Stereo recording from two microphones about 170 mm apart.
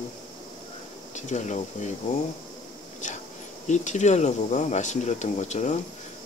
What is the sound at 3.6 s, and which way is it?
Speech, 45° left (ahead or behind).